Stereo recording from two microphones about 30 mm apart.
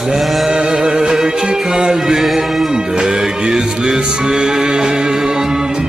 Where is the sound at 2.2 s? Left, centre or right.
Centre.